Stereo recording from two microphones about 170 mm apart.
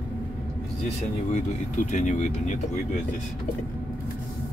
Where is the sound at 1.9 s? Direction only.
45° left (ahead or behind).